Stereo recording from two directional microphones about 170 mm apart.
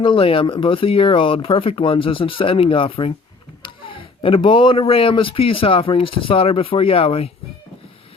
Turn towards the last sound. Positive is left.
turn(degrees=35)  # may be behind; listen again after turning